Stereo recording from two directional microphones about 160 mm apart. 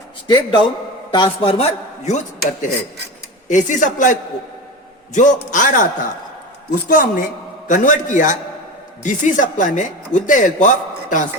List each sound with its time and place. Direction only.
0.3 s a man's voice: 30° left (ahead or behind)
2.0 s a woman's voice: 50° left (ahead or behind)